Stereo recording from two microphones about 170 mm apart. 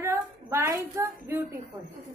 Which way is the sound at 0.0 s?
15° right (ahead or behind).